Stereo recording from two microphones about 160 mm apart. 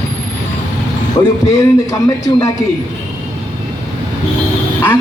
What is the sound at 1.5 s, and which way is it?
Speech, 20° left (ahead or behind).